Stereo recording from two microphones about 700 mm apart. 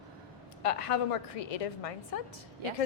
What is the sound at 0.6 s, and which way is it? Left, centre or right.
A woman's voice, left.